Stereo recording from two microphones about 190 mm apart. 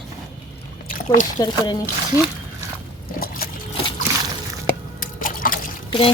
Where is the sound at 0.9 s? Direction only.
45° left (ahead or behind).